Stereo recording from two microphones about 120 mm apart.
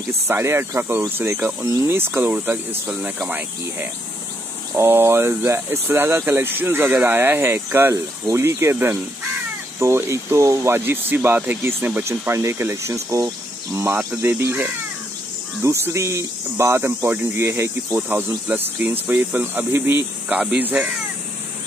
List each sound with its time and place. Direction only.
0.3 s speech: 20° right (ahead or behind)
4.7 s speech: 20° right (ahead or behind)